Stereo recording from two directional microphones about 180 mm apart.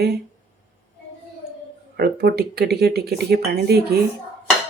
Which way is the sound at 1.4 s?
50° left (ahead or behind).